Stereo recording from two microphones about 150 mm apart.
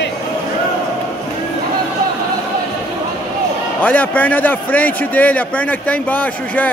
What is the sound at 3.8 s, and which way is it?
A man's voice, 10° left (ahead or behind).